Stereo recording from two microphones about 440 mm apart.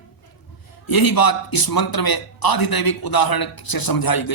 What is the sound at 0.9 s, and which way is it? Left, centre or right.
A man's voice, left.